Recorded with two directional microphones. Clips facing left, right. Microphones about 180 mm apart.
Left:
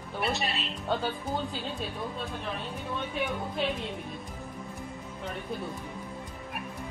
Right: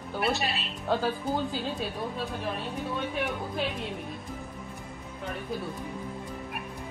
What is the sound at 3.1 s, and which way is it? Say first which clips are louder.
Speech: right 1 dB; centre (ahead or behind).